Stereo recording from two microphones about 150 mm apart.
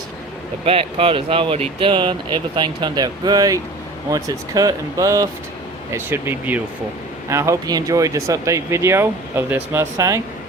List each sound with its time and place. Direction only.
0.6 s speech: 40° right (ahead or behind); by 10.2 s 20° right (ahead or behind)